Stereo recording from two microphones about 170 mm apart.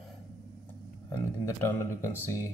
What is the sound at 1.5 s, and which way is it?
Speech, 15° left (ahead or behind).